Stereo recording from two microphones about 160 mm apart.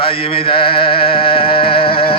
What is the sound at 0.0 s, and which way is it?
Music, 35° left (ahead or behind).